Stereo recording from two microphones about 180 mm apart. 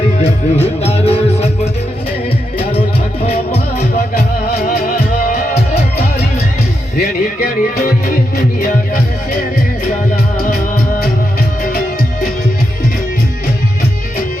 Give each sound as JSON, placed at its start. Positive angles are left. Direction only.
{"t": 0.6, "sound": "music", "side_deg": 35}
{"t": 3.2, "sound": "music", "side_deg": 35}
{"t": 6.9, "sound": "music", "side_deg": 55}